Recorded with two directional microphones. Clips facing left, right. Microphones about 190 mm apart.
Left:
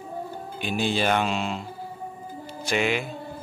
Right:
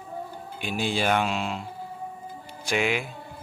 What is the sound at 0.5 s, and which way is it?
Speech, 5° right (ahead or behind).